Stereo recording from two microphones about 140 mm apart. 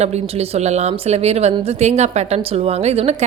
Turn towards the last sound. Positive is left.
turn(degrees=-50)  # may be behind; listen again after turning